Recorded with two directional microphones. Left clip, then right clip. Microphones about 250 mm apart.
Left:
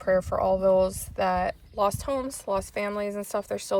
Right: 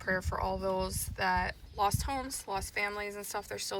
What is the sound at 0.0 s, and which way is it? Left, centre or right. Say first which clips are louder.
Speech: left 9 dB; centre.